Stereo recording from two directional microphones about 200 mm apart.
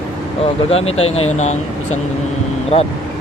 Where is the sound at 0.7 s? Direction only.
30° left (ahead or behind).